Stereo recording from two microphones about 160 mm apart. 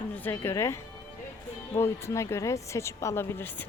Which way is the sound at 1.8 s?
15° left (ahead or behind).